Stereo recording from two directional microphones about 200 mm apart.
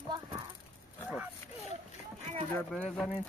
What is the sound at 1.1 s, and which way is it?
Speech, 10° right (ahead or behind).